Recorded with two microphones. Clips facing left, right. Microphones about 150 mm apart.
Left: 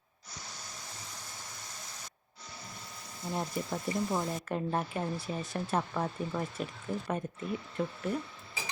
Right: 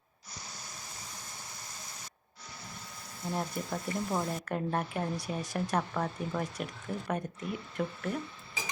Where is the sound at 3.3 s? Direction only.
Centre (ahead or behind).